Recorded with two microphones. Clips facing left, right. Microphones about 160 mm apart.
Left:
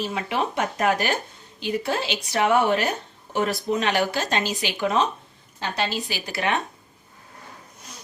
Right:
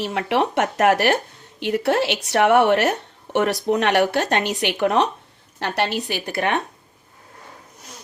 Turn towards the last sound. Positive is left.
turn(degrees=-55)  # may be behind; listen again after turning